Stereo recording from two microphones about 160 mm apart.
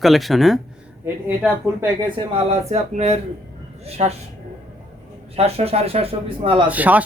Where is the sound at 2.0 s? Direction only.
35° right (ahead or behind).